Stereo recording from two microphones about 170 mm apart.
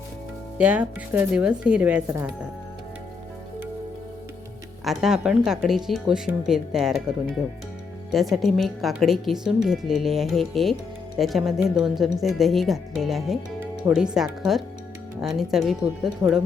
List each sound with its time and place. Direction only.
0.6 s speech: 10° right (ahead or behind)
4.9 s speech: 5° right (ahead or behind)
16.2 s speech: 20° right (ahead or behind)